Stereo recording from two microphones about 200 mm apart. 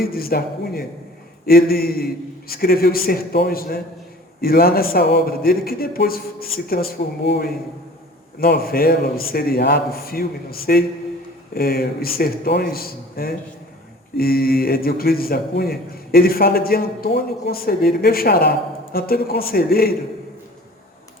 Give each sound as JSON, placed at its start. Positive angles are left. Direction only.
{"t": 0.0, "sound": "speech", "side_deg": 50}